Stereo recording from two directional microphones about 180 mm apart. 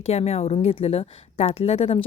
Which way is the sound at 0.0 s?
35° left (ahead or behind).